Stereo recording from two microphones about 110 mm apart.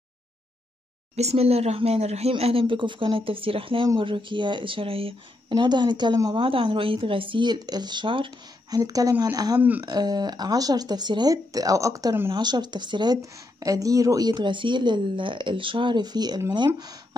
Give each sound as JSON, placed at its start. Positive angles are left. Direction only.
{"t": 1.1, "sound": "speech", "side_deg": -70}
{"t": 5.5, "sound": "speech", "side_deg": -45}
{"t": 6.3, "sound": "speech", "side_deg": -55}
{"t": 8.6, "sound": "speech", "side_deg": -35}
{"t": 9.6, "sound": "speech", "side_deg": -15}
{"t": 9.8, "sound": "speech", "side_deg": -40}
{"t": 12.3, "sound": "speech", "side_deg": -40}